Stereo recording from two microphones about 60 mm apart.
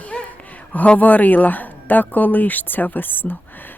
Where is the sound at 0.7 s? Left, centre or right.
Left.